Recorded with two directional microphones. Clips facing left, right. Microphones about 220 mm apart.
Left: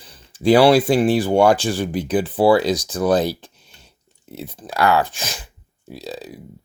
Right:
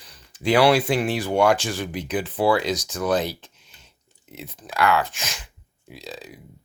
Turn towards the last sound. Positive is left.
turn(degrees=35)  # may be behind; listen again after turning